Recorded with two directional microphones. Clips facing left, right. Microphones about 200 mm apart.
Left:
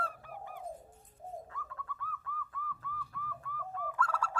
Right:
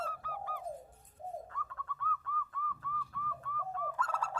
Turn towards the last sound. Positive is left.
turn(degrees=-15)  # may be behind; listen again after turning